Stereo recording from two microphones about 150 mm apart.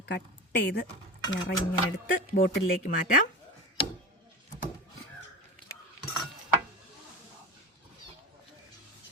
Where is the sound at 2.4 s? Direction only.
70° left (ahead or behind).